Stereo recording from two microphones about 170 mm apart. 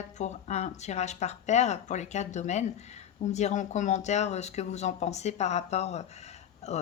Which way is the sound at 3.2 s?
45° left (ahead or behind).